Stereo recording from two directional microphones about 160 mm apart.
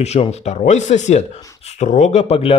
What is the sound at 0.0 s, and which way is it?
A man's voice, 40° left (ahead or behind).